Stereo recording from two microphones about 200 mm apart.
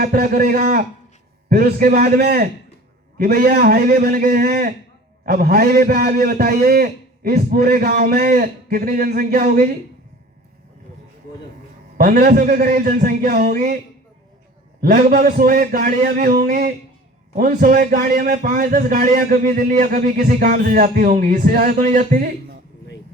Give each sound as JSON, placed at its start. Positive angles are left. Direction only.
{"t": 0.0, "sound": "a man's voice", "side_deg": -50}
{"t": 11.9, "sound": "a man's voice", "side_deg": -50}
{"t": 14.8, "sound": "a man's voice", "side_deg": -45}